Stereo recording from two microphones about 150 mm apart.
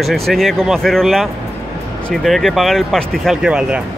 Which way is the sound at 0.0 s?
Centre (ahead or behind).